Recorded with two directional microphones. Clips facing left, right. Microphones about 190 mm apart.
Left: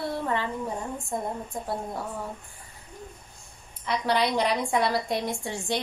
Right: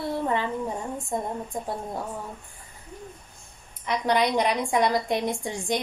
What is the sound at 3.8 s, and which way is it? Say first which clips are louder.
A woman's voice: right 2 dB; 15° right (ahead or behind).